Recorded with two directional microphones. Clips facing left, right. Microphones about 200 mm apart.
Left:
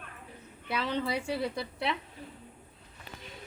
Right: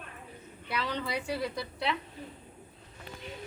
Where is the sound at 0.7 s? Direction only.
25° left (ahead or behind).